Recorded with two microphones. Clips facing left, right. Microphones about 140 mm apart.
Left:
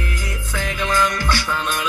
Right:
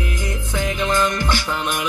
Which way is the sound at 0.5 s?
20° right (ahead or behind).